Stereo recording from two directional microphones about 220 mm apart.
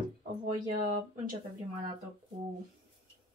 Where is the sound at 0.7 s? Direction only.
35° right (ahead or behind).